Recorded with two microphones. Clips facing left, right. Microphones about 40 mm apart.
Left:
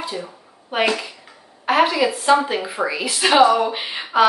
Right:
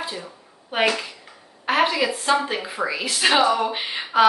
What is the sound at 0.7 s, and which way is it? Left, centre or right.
Speech, centre.